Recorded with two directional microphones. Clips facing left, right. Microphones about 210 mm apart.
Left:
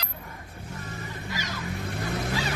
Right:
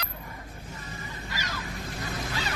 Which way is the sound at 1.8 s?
60° left (ahead or behind).